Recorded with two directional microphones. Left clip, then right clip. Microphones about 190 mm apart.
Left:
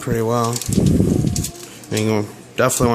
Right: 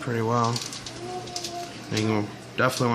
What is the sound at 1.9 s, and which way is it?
Speech, 45° left (ahead or behind).